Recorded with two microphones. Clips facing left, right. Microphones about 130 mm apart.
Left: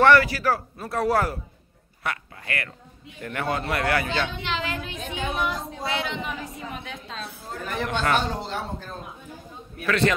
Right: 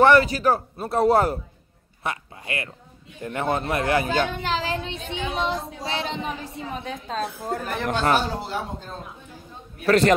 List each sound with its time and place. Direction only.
0.0 s a man's voice: 20° right (ahead or behind)
4.1 s a sound: 45° right (ahead or behind); by 5.6 s 25° right (ahead or behind)
5.9 s a woman's voice: 30° right (ahead or behind)
8.3 s speech: 5° right (ahead or behind)
9.8 s a woman's voice: 40° right (ahead or behind)